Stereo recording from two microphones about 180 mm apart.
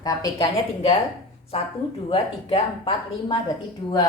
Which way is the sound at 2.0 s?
30° left (ahead or behind).